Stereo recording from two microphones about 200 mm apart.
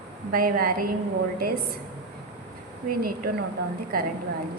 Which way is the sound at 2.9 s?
45° right (ahead or behind).